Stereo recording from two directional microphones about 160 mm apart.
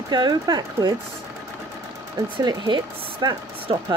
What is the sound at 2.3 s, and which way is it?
Speech, 25° right (ahead or behind).